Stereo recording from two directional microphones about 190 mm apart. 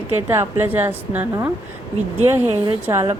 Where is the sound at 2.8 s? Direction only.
15° right (ahead or behind).